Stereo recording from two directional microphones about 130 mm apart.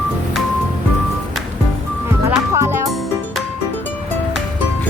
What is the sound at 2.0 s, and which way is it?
Music, 20° right (ahead or behind).